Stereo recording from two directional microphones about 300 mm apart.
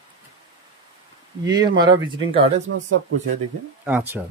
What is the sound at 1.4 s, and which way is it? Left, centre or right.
Speech, centre.